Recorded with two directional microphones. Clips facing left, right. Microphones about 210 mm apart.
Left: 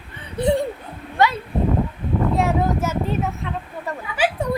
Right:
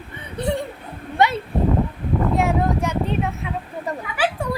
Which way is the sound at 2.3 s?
Centre (ahead or behind).